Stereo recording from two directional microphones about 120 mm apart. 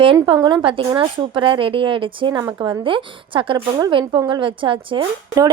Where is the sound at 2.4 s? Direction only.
30° right (ahead or behind).